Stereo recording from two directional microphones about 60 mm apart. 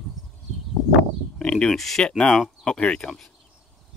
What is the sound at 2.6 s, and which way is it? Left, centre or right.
Speech, centre.